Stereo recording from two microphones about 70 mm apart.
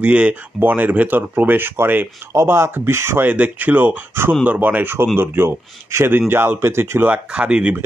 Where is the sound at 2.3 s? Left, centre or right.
Right.